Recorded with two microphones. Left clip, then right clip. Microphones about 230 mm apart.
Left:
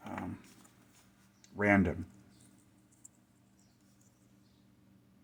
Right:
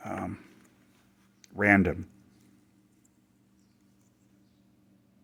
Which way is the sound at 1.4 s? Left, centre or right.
Right.